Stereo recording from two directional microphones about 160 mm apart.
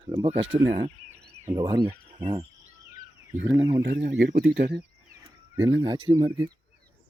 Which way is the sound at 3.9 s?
60° right (ahead or behind).